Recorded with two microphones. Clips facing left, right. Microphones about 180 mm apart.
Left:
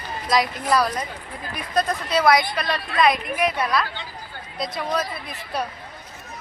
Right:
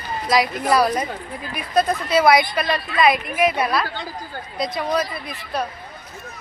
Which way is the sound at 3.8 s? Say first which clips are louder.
Right 5 dB; 40° right (ahead or behind).